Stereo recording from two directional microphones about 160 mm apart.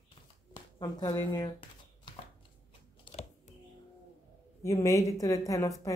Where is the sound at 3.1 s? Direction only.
40° left (ahead or behind).